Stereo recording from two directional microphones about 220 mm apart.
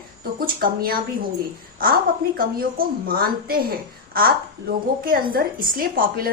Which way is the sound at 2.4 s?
40° right (ahead or behind).